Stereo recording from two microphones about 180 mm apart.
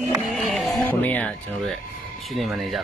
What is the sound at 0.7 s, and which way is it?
Music, 10° left (ahead or behind).